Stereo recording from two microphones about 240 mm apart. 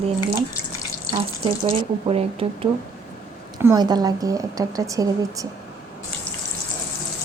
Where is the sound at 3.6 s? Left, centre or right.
Centre.